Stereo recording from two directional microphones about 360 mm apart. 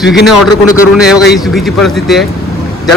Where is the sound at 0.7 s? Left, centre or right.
Centre.